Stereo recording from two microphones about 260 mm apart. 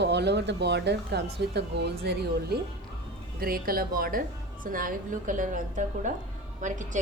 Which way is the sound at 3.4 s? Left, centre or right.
Right.